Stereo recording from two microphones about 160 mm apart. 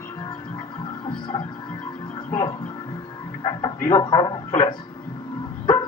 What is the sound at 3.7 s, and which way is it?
Speech, 50° left (ahead or behind).